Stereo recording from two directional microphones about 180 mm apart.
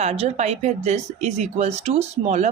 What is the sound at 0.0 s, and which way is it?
Speech, 35° right (ahead or behind).